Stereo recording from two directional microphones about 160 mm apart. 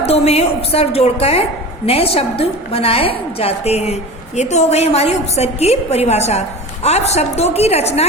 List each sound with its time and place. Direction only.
0.0 s a woman's voice: 40° left (ahead or behind)